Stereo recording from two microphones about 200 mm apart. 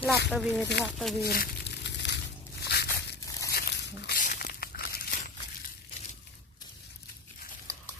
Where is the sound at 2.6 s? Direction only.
55° left (ahead or behind).